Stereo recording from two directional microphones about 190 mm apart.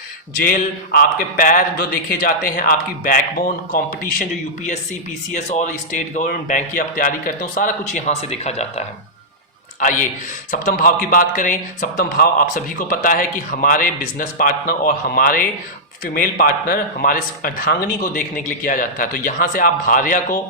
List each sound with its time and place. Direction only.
0.4 s speech: 50° left (ahead or behind)
5.3 s a man's voice: 40° left (ahead or behind)
10.5 s speech: 45° left (ahead or behind)